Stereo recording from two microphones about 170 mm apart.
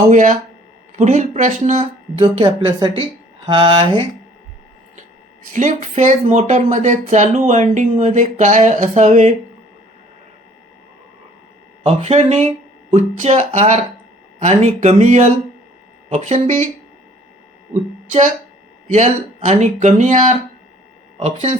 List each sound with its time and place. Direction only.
0.1 s a woman's voice: 50° right (ahead or behind); by 4.0 s 30° right (ahead or behind)
5.5 s speech: 45° right (ahead or behind)
11.8 s speech: 35° right (ahead or behind)
18.9 s speech: 40° right (ahead or behind)
21.2 s a woman's voice: 35° right (ahead or behind)